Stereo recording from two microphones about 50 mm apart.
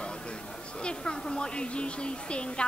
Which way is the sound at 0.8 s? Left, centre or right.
Centre.